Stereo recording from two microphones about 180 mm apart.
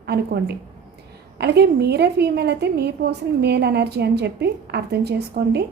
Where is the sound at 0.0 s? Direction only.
65° right (ahead or behind).